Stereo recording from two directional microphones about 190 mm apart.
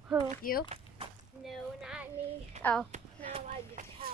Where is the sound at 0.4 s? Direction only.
50° left (ahead or behind).